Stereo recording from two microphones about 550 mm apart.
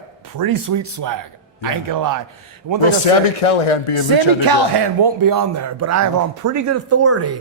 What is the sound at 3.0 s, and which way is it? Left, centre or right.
Speech, left.